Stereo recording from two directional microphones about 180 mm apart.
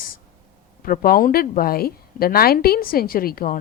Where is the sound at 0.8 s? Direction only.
55° left (ahead or behind).